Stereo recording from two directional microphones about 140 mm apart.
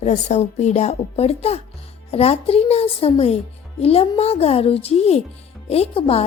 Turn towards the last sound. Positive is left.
turn(degrees=40)  # may be behind; listen again after turning